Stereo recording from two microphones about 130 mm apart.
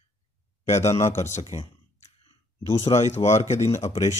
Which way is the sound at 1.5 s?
60° left (ahead or behind).